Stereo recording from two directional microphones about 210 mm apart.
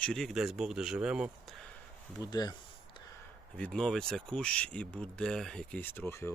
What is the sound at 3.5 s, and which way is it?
Speech, 5° left (ahead or behind).